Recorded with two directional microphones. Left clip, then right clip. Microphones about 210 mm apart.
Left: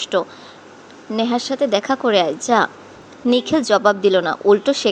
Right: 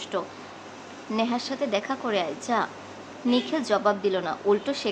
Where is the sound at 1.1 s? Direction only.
25° left (ahead or behind).